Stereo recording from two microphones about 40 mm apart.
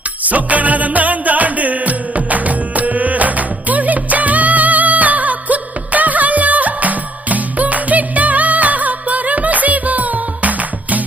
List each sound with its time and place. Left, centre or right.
0.3 s music: right